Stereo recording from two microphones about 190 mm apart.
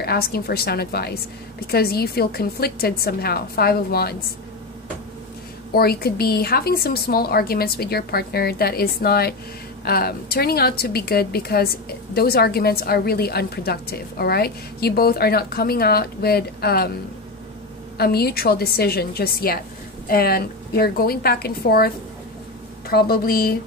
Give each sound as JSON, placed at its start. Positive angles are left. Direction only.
{"t": 0.0, "sound": "a woman's voice", "side_deg": 55}
{"t": 5.7, "sound": "a woman's voice", "side_deg": 55}
{"t": 17.9, "sound": "a woman's voice", "side_deg": 55}